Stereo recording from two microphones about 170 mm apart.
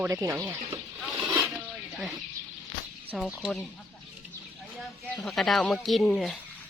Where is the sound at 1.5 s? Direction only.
5° right (ahead or behind).